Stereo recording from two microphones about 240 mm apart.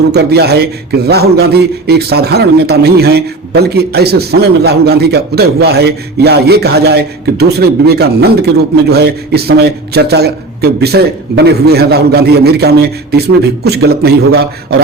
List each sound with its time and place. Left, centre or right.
0.1 s a man's voice: right